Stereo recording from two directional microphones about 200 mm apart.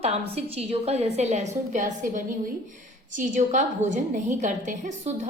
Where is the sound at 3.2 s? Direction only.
35° right (ahead or behind).